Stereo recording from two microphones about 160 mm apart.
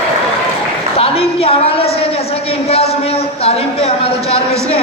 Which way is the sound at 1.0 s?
35° left (ahead or behind).